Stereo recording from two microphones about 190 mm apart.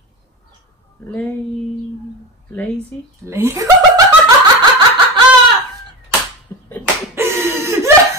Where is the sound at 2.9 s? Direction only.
5° left (ahead or behind).